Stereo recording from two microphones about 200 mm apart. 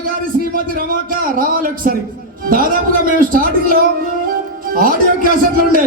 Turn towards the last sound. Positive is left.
turn(degrees=-45)  # may be behind; listen again after turning